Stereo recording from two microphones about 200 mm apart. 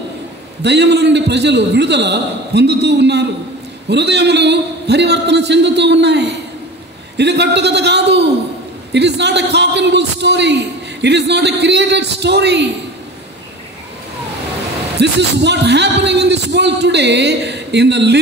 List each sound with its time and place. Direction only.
0.6 s a man's voice: 55° right (ahead or behind)
15.0 s a man's voice: 60° right (ahead or behind)